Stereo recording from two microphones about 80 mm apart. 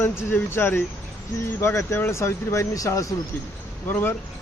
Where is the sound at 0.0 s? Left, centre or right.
Left.